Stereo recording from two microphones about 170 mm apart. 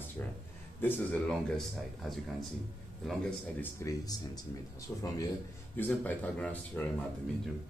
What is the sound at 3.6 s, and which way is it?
Speech, 20° left (ahead or behind).